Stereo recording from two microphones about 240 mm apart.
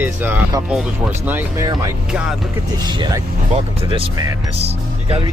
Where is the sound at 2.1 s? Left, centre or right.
Centre.